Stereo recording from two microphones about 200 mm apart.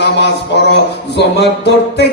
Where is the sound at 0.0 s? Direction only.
60° left (ahead or behind).